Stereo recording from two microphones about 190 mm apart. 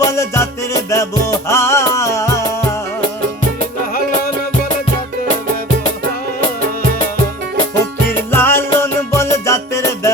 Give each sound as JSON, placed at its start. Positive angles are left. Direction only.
{"t": 0.0, "sound": "music", "side_deg": 15}
{"t": 8.3, "sound": "music", "side_deg": 10}